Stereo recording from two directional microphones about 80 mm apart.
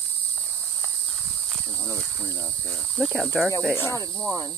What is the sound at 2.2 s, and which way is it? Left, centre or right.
Speech, left.